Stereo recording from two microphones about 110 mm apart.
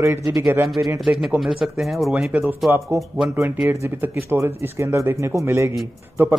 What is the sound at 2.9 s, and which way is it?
Speech, 25° right (ahead or behind).